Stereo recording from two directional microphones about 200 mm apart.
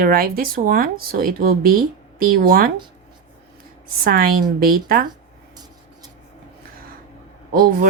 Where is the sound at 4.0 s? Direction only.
45° right (ahead or behind).